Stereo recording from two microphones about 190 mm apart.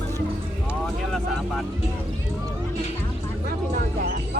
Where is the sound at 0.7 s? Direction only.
Centre (ahead or behind).